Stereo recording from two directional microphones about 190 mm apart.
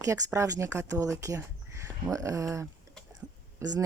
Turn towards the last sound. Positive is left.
turn(degrees=-15)  # may be behind; listen again after turning